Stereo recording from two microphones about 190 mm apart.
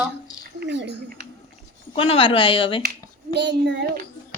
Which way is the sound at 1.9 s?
30° left (ahead or behind).